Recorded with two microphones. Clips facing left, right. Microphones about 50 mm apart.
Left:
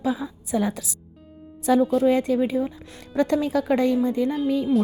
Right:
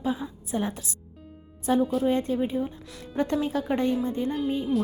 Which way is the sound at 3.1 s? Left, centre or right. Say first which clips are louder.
Left 5 dB; left.